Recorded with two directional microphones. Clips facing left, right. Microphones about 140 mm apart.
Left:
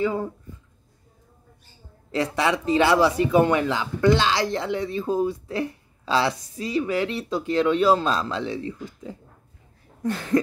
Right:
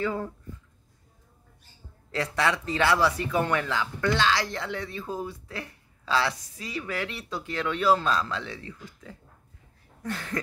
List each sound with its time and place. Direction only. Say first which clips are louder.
0.0 s speech: left 5 dB; 15° left (ahead or behind)
2.0 s speech: left 4 dB; 20° left (ahead or behind)